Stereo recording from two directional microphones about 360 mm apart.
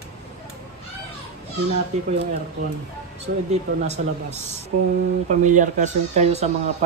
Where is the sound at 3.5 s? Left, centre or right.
Centre.